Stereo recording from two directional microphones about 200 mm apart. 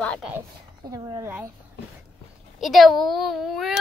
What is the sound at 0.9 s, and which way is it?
Speech, 15° right (ahead or behind).